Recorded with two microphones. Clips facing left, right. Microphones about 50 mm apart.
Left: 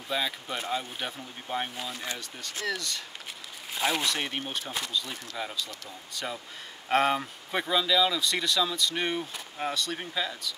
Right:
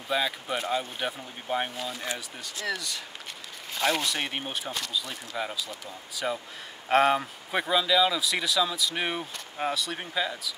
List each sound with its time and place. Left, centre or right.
0.1 s speech: centre
1.8 s speech: centre